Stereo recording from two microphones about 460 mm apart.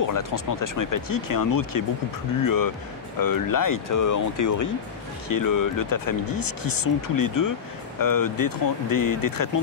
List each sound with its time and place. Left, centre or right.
0.0 s speech: left